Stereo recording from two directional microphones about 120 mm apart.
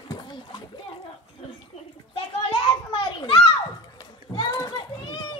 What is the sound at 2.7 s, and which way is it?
Children playing, 50° left (ahead or behind).